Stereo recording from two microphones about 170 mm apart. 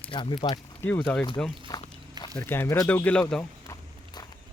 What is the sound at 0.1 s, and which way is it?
Speech, 30° left (ahead or behind).